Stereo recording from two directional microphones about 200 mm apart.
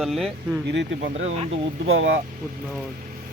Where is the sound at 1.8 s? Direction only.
75° right (ahead or behind).